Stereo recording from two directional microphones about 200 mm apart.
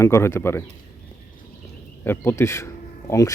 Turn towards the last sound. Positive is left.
turn(degrees=15)  # may be behind; listen again after turning